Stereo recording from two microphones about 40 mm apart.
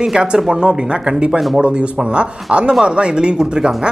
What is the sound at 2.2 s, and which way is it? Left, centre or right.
Speech, right.